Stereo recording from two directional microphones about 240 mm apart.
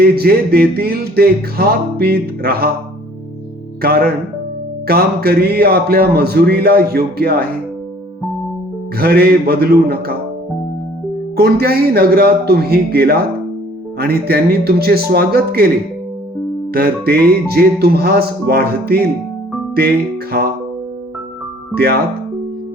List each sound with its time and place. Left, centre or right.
0.0 s speech: right
3.8 s speech: right
9.0 s speech: right
11.3 s speech: right
16.7 s speech: right